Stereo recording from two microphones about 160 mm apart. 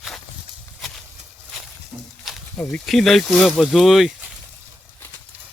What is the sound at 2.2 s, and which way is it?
Snake, centre (ahead or behind).